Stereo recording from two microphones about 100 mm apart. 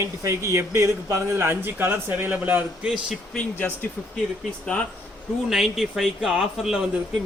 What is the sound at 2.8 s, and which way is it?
Speech, centre (ahead or behind).